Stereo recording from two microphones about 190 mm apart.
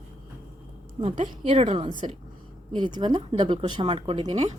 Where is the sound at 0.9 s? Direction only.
25° right (ahead or behind).